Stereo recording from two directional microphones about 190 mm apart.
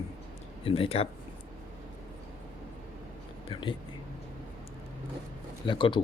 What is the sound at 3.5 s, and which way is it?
Speech, 25° left (ahead or behind).